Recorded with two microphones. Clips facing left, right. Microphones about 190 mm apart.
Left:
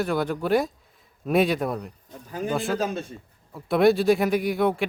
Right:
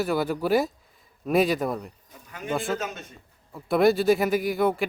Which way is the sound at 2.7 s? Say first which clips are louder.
Left 6 dB; 30° left (ahead or behind).